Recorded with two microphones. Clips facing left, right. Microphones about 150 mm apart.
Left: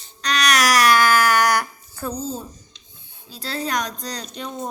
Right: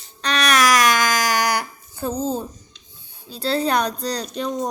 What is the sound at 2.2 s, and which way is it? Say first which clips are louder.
Speech: right 7 dB; 60° right (ahead or behind).